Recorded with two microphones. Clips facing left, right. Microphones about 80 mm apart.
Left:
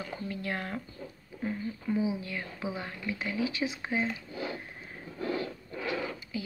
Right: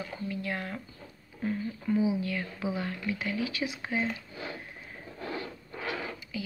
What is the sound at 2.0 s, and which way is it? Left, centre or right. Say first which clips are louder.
Speech: right 3 dB; left.